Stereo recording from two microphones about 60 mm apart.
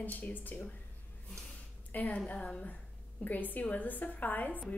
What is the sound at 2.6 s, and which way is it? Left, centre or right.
A woman's voice, left.